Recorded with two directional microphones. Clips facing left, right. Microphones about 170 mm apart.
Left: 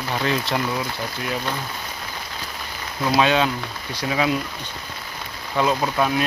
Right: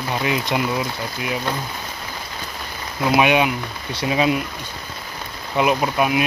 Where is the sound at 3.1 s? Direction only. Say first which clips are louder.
Right 2 dB; 15° right (ahead or behind).